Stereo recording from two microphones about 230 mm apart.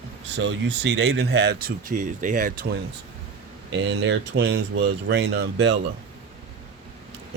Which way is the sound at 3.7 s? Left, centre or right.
Right.